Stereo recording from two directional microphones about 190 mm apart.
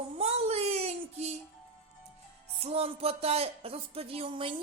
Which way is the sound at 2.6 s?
30° right (ahead or behind).